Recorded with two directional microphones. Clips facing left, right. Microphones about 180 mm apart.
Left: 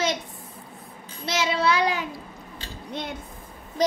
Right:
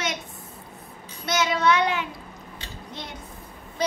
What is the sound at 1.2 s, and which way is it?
Child singing, 30° left (ahead or behind).